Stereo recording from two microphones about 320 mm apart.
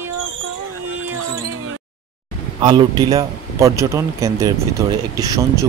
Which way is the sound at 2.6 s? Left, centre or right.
Centre.